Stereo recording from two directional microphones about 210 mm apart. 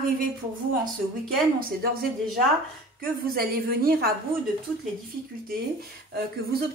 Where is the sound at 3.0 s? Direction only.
45° right (ahead or behind).